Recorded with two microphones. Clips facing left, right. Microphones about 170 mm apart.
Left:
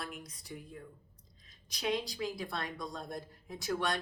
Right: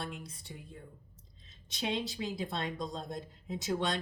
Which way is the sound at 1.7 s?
25° right (ahead or behind).